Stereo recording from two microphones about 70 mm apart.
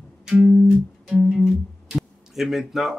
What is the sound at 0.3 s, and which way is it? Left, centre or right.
Music, centre.